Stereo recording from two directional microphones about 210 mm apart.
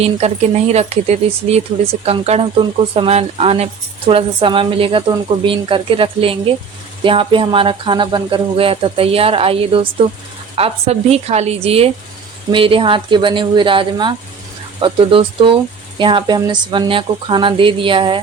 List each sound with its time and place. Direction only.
0.0 s speech: 30° right (ahead or behind)